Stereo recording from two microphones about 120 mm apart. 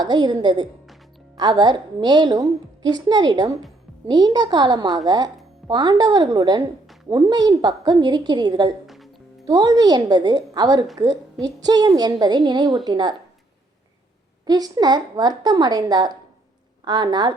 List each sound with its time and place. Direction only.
0.0 s a woman's voice: 40° right (ahead or behind)
14.4 s a woman's voice: 35° right (ahead or behind)